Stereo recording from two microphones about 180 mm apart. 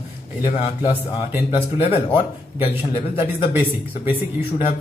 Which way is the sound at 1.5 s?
30° left (ahead or behind).